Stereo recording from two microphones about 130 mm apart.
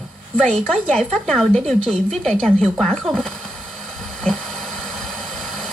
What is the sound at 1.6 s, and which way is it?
Speech, 50° right (ahead or behind).